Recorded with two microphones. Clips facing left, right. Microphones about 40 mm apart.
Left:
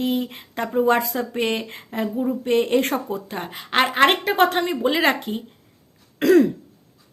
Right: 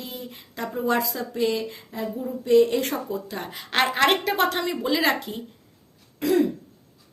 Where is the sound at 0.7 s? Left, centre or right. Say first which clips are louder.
Left 5 dB; left.